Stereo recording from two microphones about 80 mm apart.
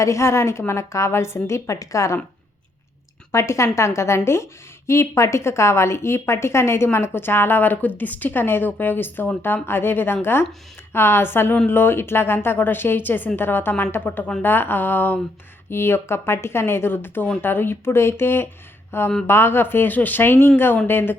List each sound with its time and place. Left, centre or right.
0.0 s speech: left
3.3 s speech: left